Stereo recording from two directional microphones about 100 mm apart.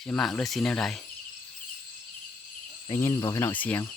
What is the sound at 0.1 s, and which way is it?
Speech, 10° left (ahead or behind).